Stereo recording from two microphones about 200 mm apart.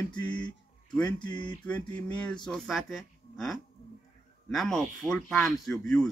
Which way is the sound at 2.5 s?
Centre (ahead or behind).